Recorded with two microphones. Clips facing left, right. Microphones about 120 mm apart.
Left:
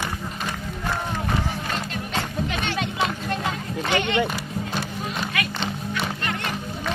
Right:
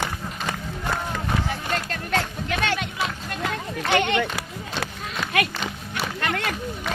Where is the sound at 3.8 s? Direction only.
20° left (ahead or behind).